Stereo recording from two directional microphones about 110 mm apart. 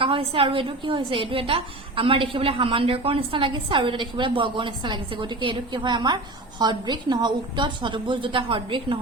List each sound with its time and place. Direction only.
0.0 s a woman's voice: 55° right (ahead or behind)